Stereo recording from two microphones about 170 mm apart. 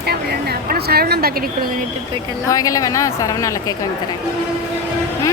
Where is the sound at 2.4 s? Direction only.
20° left (ahead or behind).